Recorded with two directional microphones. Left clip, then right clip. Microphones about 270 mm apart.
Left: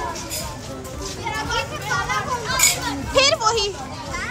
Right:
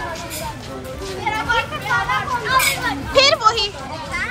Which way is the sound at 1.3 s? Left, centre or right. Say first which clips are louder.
Right 5 dB; centre.